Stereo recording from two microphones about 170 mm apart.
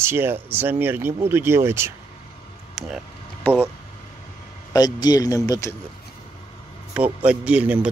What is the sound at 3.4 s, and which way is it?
Speech, 10° left (ahead or behind).